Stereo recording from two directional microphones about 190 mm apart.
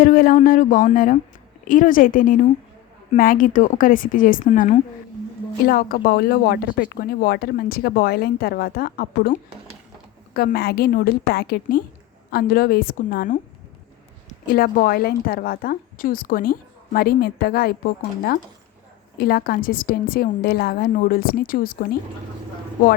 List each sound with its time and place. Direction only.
0.0 s speech: 45° left (ahead or behind)
19.1 s speech: 55° left (ahead or behind)